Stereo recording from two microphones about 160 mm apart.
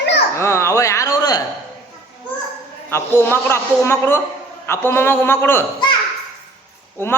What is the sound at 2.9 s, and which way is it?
A woman's voice, 15° left (ahead or behind).